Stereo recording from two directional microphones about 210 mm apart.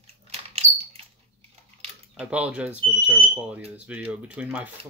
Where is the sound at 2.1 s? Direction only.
5° right (ahead or behind).